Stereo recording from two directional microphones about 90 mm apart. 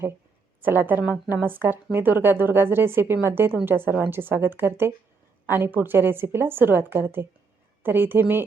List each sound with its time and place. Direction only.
0.6 s speech: 20° right (ahead or behind)